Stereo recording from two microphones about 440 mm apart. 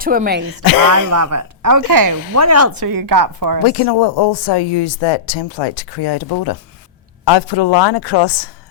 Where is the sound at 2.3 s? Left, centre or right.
Right.